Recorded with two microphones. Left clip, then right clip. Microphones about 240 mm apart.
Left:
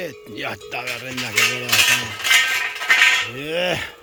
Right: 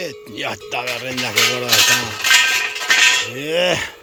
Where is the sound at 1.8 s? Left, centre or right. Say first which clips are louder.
Right 3 dB; right.